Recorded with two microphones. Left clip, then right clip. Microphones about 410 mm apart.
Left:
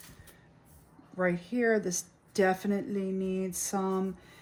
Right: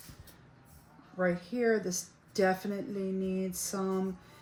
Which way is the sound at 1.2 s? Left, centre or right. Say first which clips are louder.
Left 1 dB; left.